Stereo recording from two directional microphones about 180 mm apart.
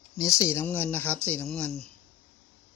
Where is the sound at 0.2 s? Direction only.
20° left (ahead or behind).